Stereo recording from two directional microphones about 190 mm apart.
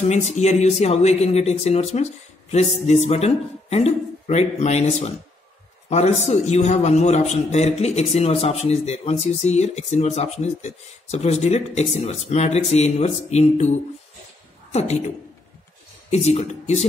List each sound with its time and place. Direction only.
0.0 s a man's voice: 35° left (ahead or behind)
16.1 s a man's voice: 35° left (ahead or behind)